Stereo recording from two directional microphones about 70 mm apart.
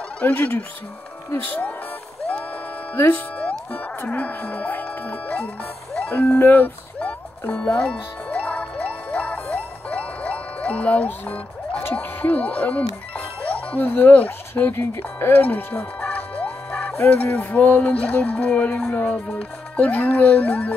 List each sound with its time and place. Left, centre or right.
0.2 s speech: left
2.9 s speech: left
3.3 s music: centre
4.0 s speech: left
5.9 s music: left
11.8 s speech: left
15.4 s music: left
17.1 s speech: left